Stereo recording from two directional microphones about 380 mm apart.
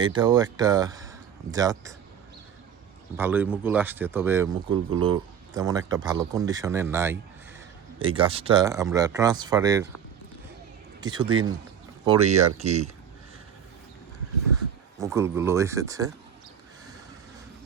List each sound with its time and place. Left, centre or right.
0.0 s speech: centre
3.2 s speech: centre
11.0 s speech: centre
14.9 s speech: centre